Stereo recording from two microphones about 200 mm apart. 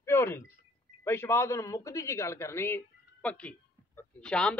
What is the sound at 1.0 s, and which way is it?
A man's voice, 10° left (ahead or behind).